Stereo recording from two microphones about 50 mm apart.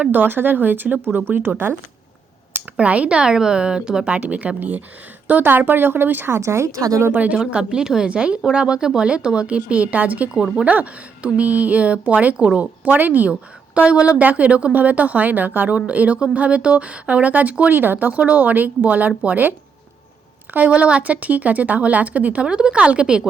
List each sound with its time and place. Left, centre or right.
0.1 s speech: right
1.0 s speech: right
2.7 s speech: right
4.2 s speech: right
6.3 s speech: right
7.1 s speech: right
7.3 s speech: centre; by 10.2 s right
10.3 s speech: centre
10.7 s speech: right
13.7 s speech: right
17.7 s speech: right; by 23.2 s centre